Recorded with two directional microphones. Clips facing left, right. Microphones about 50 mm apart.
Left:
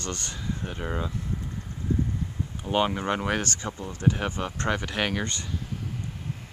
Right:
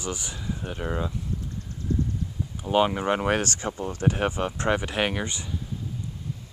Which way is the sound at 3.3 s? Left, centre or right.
Right.